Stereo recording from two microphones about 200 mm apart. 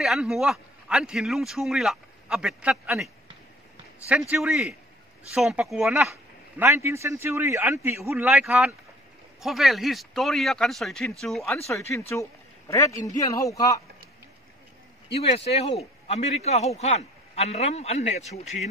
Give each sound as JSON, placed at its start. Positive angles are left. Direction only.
{"t": 0.0, "sound": "a man's voice", "side_deg": 0}
{"t": 4.1, "sound": "a man's voice", "side_deg": -5}
{"t": 12.1, "sound": "a man's voice", "side_deg": 15}
{"t": 15.5, "sound": "a man's voice", "side_deg": 30}